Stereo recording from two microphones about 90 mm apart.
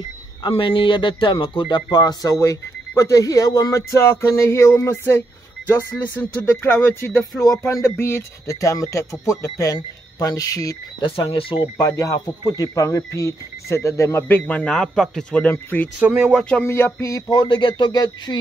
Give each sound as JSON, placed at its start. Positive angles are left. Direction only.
{"t": 0.5, "sound": "speech", "side_deg": 70}
{"t": 1.9, "sound": "speech", "side_deg": 50}
{"t": 2.3, "sound": "speech", "side_deg": 35}
{"t": 7.2, "sound": "speech", "side_deg": 40}
{"t": 11.0, "sound": "speech", "side_deg": 90}
{"t": 11.8, "sound": "speech", "side_deg": 40}
{"t": 16.0, "sound": "speech", "side_deg": -20}
{"t": 16.6, "sound": "speech", "side_deg": 30}
{"t": 17.3, "sound": "speech", "side_deg": 55}